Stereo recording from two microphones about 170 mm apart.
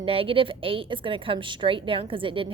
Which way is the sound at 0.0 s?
35° right (ahead or behind).